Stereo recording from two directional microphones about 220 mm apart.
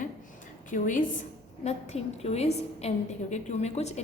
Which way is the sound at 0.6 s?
35° left (ahead or behind).